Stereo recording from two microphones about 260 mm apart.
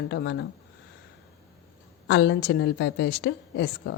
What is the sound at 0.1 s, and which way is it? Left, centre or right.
Speech, left.